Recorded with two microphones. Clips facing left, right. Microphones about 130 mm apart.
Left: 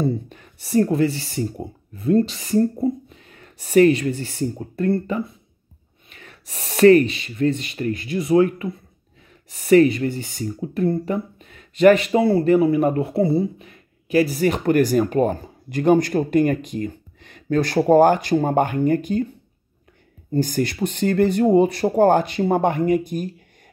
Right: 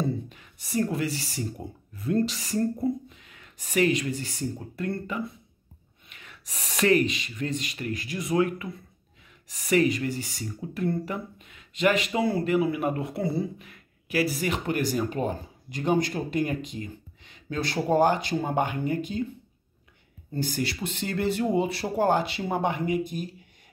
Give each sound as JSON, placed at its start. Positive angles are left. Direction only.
{"t": 0.0, "sound": "a sound", "side_deg": 45}
{"t": 0.6, "sound": "speech", "side_deg": 30}
{"t": 3.3, "sound": "speech", "side_deg": 40}
{"t": 14.4, "sound": "speech", "side_deg": 40}
{"t": 20.3, "sound": "speech", "side_deg": 45}